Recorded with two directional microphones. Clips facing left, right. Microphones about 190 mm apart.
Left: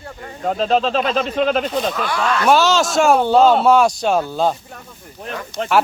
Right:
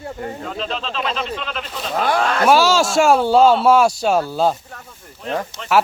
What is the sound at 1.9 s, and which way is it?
Speech, 50° right (ahead or behind).